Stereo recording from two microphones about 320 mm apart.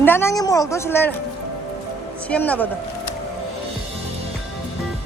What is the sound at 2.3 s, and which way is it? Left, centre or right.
Speech, centre.